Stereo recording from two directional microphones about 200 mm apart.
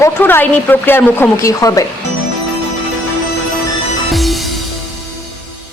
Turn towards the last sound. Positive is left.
turn(degrees=0)  # may be behind; listen again after turning